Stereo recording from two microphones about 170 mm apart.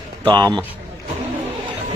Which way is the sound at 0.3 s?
25° right (ahead or behind).